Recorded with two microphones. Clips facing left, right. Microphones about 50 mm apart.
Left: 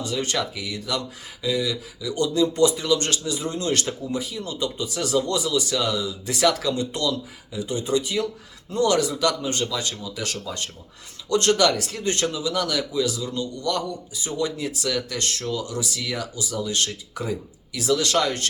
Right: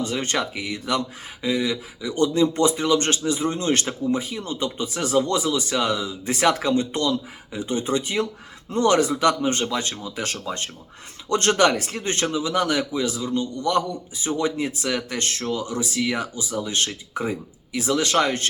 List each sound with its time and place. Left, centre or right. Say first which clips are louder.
0.0 s speech: right 1 dB; right